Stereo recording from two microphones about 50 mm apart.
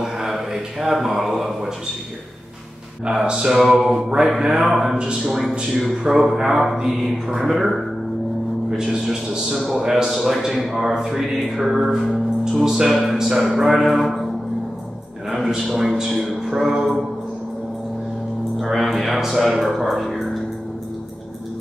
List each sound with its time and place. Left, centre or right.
0.0 s a sound: centre
3.3 s mantra: centre
7.3 s speech: centre
8.6 s mantra: centre
12.1 s speech: centre
13.0 s mantra: centre
13.4 s speech: centre
15.2 s speech: centre
18.6 s speech: centre